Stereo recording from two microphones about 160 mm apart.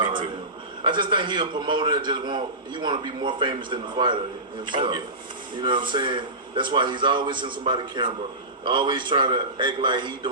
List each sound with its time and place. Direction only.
0.9 s a man's voice: 30° right (ahead or behind)